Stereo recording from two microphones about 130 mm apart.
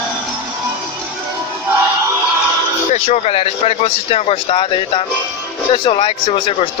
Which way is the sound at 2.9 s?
60° left (ahead or behind).